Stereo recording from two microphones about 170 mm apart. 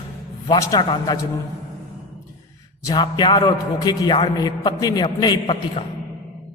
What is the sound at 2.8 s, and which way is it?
A man's voice, 25° left (ahead or behind).